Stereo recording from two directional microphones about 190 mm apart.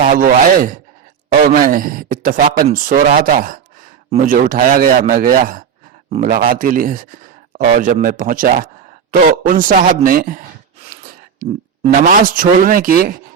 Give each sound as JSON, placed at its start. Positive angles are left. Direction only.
{"t": 0.0, "sound": "speech", "side_deg": -45}